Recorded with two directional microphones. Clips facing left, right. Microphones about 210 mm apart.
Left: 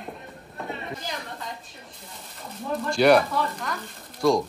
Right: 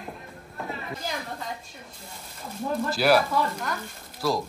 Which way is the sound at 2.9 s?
5° right (ahead or behind).